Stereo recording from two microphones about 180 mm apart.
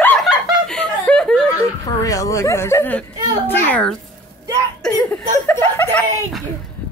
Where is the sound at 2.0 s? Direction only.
20° left (ahead or behind).